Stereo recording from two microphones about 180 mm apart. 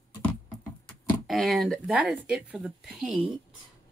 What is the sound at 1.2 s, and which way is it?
Speech, centre (ahead or behind).